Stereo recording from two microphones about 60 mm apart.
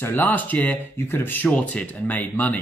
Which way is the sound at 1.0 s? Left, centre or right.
Left.